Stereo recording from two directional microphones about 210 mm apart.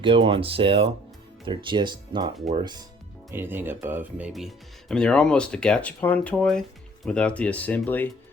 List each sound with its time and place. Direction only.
0.0 s speech: 25° right (ahead or behind)
3.3 s speech: 10° right (ahead or behind); by 8.0 s 10° left (ahead or behind)